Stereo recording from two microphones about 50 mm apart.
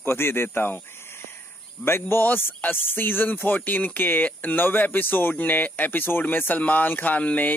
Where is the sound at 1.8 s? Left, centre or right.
Left.